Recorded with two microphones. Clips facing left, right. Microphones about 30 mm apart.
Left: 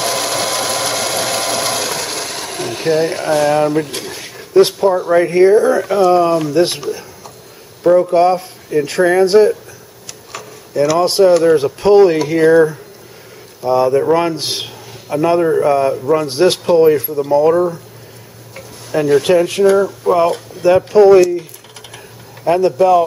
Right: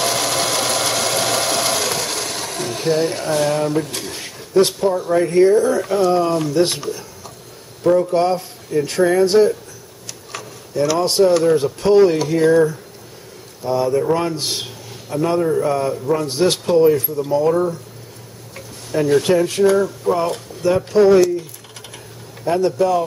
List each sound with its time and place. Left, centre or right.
0.0 s a sound: centre
3.3 s speech: centre
10.3 s tick-tock: centre
10.7 s speech: centre
18.5 s tick-tock: centre
19.6 s speech: centre
20.6 s speech: left
22.4 s speech: centre